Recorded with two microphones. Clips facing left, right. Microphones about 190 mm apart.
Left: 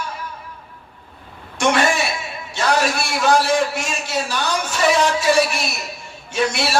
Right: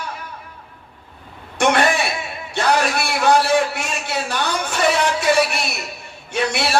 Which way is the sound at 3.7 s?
60° right (ahead or behind).